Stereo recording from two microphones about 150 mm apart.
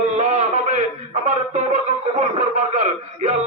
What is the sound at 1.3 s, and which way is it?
Music, 55° right (ahead or behind).